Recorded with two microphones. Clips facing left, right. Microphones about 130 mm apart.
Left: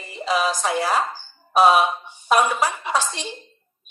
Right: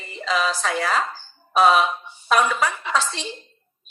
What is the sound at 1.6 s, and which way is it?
A woman's voice, 5° left (ahead or behind).